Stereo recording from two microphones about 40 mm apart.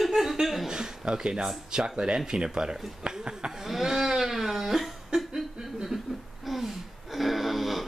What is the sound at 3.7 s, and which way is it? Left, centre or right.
Music, centre.